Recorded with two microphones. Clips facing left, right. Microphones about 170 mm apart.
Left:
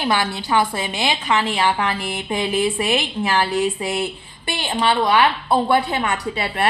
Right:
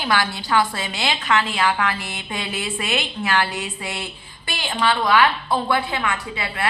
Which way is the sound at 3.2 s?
30° left (ahead or behind).